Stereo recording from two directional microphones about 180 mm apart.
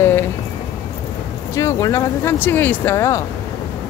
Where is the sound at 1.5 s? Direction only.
15° left (ahead or behind).